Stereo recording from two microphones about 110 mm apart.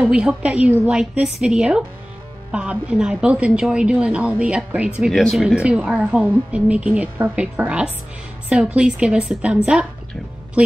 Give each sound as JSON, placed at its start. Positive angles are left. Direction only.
{"t": 0.1, "sound": "a woman's voice", "side_deg": -10}